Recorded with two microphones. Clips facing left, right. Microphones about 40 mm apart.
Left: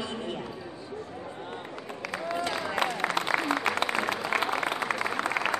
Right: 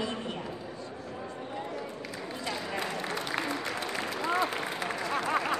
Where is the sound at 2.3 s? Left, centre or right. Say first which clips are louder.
Left 5 dB; left.